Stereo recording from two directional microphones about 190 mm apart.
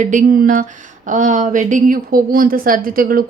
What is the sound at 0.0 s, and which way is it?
A woman's voice, 40° right (ahead or behind).